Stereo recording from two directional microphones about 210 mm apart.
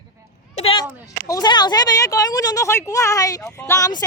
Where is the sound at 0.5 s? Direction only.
25° left (ahead or behind).